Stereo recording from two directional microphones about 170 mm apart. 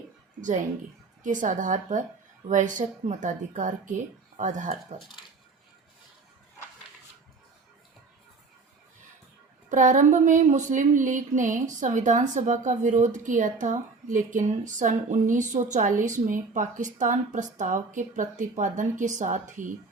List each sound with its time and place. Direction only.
1.2 s speech: 50° right (ahead or behind)
9.6 s speech: 45° right (ahead or behind)